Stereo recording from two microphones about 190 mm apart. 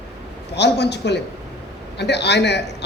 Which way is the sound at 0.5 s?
65° left (ahead or behind).